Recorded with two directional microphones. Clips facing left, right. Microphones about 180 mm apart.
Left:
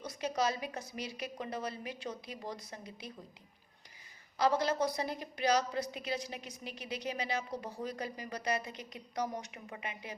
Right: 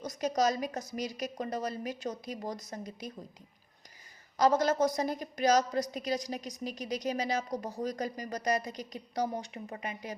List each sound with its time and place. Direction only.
0.0 s a woman's voice: 40° right (ahead or behind)
4.4 s a woman's voice: 45° right (ahead or behind)